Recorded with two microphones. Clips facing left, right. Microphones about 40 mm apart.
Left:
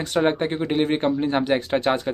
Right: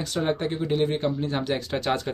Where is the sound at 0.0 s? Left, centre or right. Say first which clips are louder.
Left 5 dB; left.